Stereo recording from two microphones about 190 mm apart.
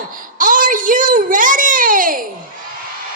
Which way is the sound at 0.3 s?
45° right (ahead or behind).